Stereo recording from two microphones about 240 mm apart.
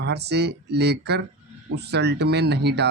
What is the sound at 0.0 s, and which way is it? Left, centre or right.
Speech, right.